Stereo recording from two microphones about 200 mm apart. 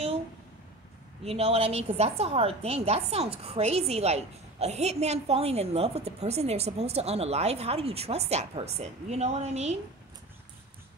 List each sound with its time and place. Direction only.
1.2 s a woman's voice: 30° right (ahead or behind)